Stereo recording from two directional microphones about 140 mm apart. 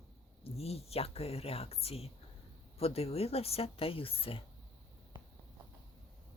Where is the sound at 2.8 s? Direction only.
45° left (ahead or behind).